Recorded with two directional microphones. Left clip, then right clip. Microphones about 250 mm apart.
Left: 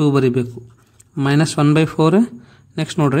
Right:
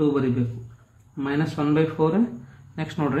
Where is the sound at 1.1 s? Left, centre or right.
Left.